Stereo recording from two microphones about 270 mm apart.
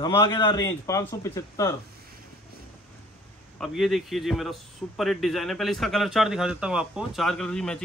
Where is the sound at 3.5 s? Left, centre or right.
Centre.